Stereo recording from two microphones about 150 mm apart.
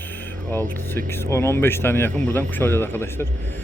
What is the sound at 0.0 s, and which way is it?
Speech, 10° left (ahead or behind).